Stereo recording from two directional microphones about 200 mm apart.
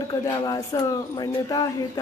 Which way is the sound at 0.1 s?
20° left (ahead or behind).